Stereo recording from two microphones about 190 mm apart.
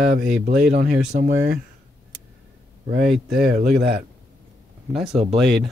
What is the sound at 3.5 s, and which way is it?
Speech, 55° right (ahead or behind).